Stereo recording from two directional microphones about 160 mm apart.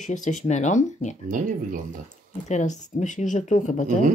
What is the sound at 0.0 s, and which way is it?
Speech, 50° left (ahead or behind).